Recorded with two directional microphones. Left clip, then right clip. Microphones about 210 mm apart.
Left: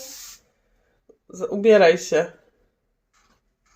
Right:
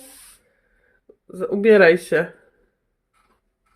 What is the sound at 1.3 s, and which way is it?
Speech, 40° right (ahead or behind).